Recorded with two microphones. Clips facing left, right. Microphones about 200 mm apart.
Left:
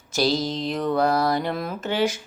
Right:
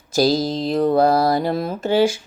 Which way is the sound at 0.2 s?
35° right (ahead or behind).